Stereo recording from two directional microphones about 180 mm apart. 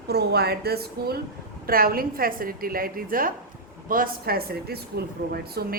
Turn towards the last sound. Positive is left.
turn(degrees=-60)  # may be behind; listen again after turning